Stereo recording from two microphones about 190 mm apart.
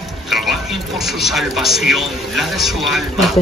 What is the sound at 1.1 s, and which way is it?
A man's voice, centre (ahead or behind).